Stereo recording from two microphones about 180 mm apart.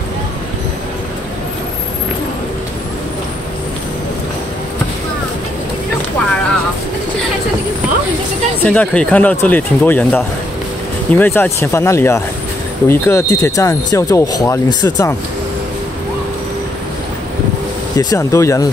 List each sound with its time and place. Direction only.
8.6 s speech: 5° left (ahead or behind)
17.9 s speech: 15° left (ahead or behind)